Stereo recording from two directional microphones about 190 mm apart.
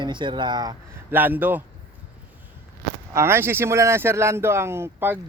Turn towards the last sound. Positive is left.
turn(degrees=-10)  # may be behind; listen again after turning